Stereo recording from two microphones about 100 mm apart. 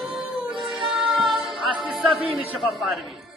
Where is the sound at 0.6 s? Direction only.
Centre (ahead or behind).